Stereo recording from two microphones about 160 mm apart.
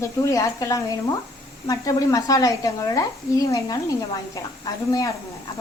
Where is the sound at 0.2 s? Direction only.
20° left (ahead or behind).